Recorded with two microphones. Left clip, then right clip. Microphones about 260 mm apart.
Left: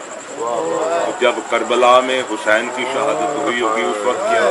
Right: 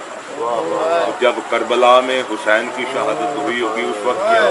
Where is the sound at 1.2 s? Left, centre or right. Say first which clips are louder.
Even; centre.